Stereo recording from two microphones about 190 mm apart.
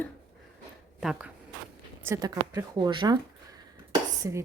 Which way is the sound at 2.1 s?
20° right (ahead or behind).